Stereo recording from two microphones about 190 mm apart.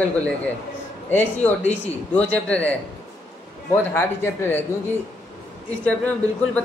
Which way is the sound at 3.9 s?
10° left (ahead or behind).